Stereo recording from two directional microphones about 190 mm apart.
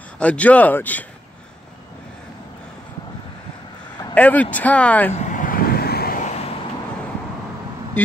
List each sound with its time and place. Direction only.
0.2 s speech: 5° left (ahead or behind)
4.1 s speech: 10° left (ahead or behind)
5.1 s vehicle: 40° left (ahead or behind)